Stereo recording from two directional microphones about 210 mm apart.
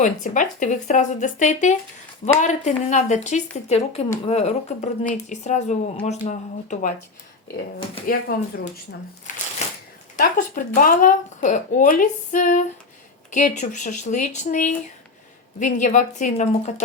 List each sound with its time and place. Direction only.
0.0 s speech: 40° left (ahead or behind)
8.0 s speech: 45° left (ahead or behind)